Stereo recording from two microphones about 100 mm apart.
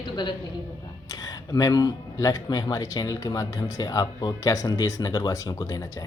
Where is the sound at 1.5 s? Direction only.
40° left (ahead or behind).